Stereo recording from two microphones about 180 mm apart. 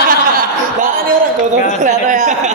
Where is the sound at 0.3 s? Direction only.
50° right (ahead or behind).